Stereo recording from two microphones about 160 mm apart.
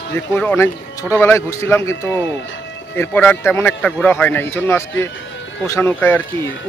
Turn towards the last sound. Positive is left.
turn(degrees=15)  # may be behind; listen again after turning